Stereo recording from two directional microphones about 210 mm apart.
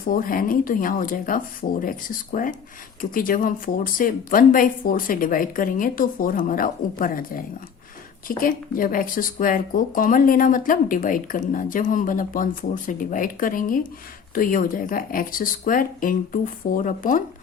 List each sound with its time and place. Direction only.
0.0 s speech: 45° left (ahead or behind)